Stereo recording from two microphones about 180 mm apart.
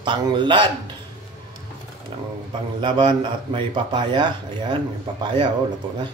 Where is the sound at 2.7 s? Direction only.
25° right (ahead or behind).